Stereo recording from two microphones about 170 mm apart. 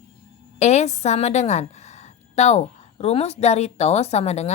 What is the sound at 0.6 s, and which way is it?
Speech, 40° left (ahead or behind).